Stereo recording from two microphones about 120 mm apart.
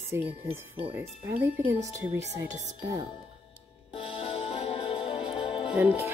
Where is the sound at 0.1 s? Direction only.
20° right (ahead or behind).